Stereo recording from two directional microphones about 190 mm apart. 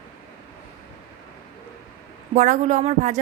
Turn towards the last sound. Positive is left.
turn(degrees=-35)  # may be behind; listen again after turning